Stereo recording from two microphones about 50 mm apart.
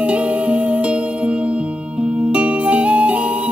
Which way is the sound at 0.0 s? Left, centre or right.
Right.